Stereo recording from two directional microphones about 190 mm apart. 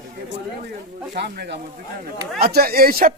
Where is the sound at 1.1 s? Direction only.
65° right (ahead or behind).